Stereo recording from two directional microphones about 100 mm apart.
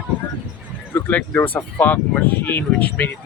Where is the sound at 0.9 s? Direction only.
15° left (ahead or behind).